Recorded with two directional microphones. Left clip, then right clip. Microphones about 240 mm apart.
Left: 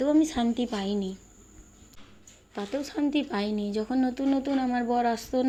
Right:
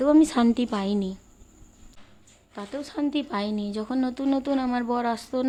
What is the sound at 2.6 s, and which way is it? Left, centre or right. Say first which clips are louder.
A woman's voice: left 1 dB; centre.